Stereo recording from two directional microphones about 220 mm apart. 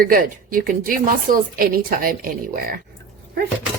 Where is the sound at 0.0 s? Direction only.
40° right (ahead or behind).